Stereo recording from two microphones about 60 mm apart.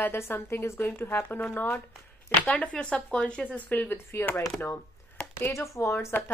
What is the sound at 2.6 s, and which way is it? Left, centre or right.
Speech, centre.